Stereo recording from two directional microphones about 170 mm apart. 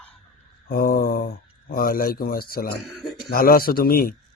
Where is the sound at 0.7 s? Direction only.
60° left (ahead or behind).